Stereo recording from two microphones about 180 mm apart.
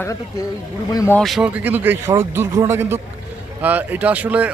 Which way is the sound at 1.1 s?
Centre (ahead or behind).